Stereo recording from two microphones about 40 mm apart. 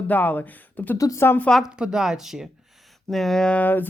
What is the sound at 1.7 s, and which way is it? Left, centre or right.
Speech, centre.